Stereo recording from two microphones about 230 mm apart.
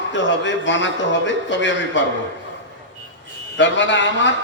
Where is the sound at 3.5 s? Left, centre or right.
Left.